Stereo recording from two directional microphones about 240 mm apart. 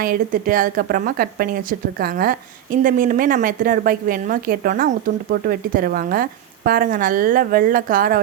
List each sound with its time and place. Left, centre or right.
0.0 s a woman's voice: right